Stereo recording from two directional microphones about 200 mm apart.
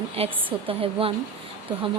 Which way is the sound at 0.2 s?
30° right (ahead or behind).